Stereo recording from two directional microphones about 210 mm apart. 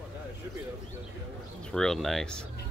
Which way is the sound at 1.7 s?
Centre (ahead or behind).